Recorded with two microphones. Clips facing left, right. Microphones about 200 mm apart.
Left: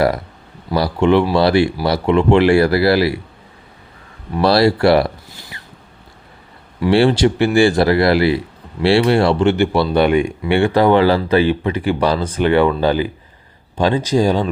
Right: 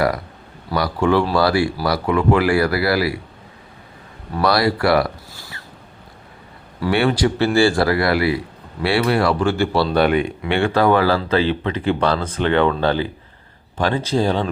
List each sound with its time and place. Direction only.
0.7 s speech: 25° left (ahead or behind)
4.4 s speech: 25° left (ahead or behind)
6.9 s speech: 30° left (ahead or behind); by 14.5 s 10° left (ahead or behind)